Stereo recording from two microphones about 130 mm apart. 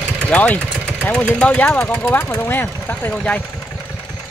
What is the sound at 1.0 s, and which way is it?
Speech, 10° left (ahead or behind).